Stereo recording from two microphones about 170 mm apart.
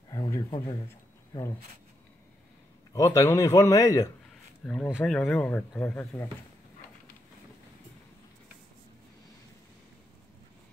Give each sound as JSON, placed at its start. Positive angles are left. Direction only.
{"t": 0.1, "sound": "a sound", "side_deg": 20}
{"t": 2.9, "sound": "a man's voice", "side_deg": 20}
{"t": 4.6, "sound": "speech", "side_deg": 10}